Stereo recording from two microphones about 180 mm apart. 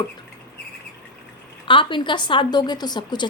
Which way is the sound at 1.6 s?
30° left (ahead or behind).